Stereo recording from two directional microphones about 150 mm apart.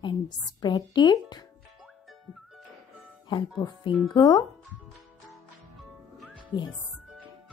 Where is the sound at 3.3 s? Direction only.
30° left (ahead or behind).